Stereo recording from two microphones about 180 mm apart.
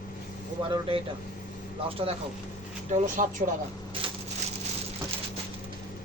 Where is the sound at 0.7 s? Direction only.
30° right (ahead or behind).